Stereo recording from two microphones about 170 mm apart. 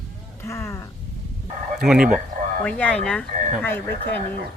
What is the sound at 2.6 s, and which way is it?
Speech, 10° left (ahead or behind).